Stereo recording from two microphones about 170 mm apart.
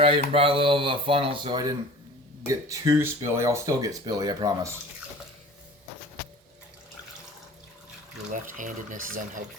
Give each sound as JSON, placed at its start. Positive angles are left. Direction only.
{"t": 0.3, "sound": "speech", "side_deg": -35}
{"t": 8.3, "sound": "speech", "side_deg": -50}